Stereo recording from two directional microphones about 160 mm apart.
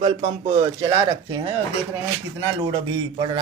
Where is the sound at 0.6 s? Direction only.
25° right (ahead or behind).